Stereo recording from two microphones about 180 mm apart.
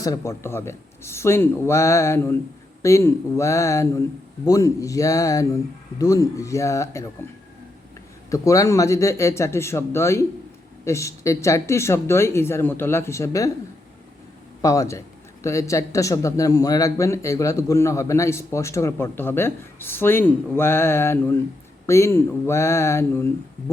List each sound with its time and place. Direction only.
0.0 s speech: 15° left (ahead or behind)
8.3 s speech: 20° left (ahead or behind)
14.6 s speech: 20° left (ahead or behind)